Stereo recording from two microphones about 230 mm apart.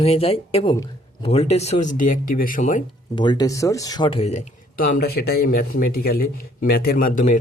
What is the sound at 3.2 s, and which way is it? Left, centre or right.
Speech, centre.